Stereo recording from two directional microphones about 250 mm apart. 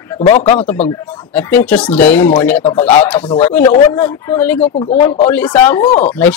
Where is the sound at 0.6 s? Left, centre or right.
Centre.